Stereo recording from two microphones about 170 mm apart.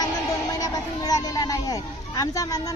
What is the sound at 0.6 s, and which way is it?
Speech, 20° left (ahead or behind).